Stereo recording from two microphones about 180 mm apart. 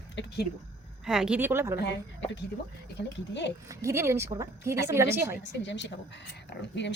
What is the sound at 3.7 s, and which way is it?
A woman's voice, 15° right (ahead or behind).